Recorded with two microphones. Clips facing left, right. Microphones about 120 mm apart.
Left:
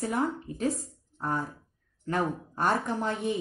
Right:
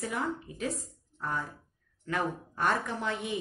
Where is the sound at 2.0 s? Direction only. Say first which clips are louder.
Left 3 dB; 35° left (ahead or behind).